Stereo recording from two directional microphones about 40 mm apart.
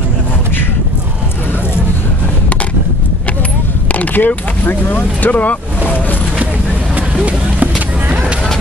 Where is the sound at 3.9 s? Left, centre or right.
Left.